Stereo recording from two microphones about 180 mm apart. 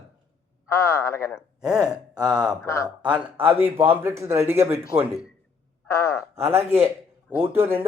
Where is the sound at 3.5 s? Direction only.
10° right (ahead or behind).